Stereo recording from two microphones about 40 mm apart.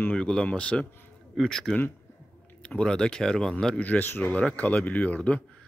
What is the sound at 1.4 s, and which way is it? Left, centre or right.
Speech, centre.